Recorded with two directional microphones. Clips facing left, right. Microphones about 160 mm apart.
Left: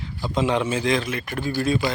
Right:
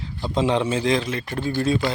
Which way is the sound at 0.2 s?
25° right (ahead or behind).